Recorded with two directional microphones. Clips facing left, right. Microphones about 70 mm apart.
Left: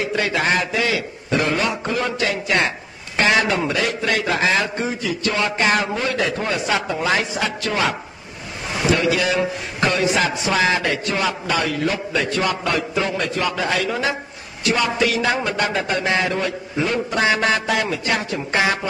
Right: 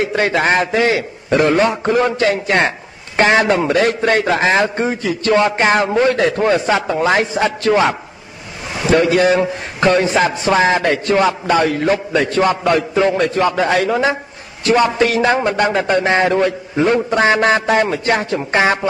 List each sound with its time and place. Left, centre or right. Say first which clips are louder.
0.0 s a man's voice: right 5 dB; right
8.9 s a man's voice: right 8 dB; right